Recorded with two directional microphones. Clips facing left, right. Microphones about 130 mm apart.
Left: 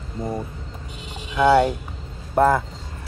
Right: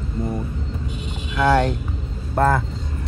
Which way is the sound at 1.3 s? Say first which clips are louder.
Left 2 dB; 10° left (ahead or behind).